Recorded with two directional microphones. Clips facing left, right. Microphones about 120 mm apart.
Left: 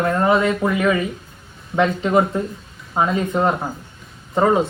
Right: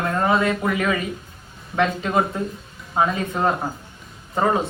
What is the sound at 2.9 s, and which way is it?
Speech, 5° left (ahead or behind).